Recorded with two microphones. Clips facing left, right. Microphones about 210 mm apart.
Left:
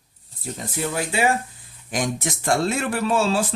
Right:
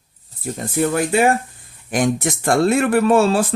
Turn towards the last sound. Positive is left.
turn(degrees=-55)  # may be behind; listen again after turning